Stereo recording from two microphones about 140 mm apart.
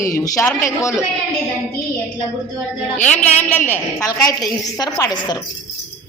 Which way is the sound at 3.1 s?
10° left (ahead or behind).